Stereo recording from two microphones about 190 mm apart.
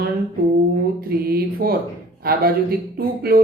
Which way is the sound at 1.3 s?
50° right (ahead or behind).